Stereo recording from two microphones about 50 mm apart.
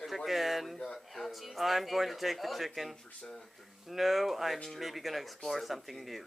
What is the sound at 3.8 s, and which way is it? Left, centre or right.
Speech, centre.